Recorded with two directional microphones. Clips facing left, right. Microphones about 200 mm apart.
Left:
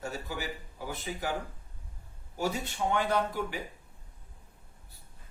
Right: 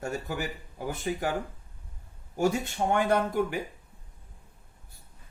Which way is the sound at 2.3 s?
50° right (ahead or behind).